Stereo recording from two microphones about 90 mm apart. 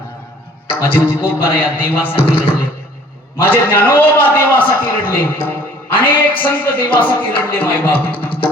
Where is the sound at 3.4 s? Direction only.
20° left (ahead or behind).